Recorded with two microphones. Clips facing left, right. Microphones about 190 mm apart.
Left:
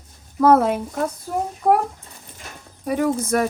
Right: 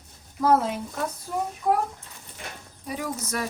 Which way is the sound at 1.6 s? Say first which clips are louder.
Left 7 dB; 50° left (ahead or behind).